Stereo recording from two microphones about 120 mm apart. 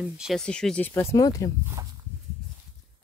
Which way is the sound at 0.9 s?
20° left (ahead or behind).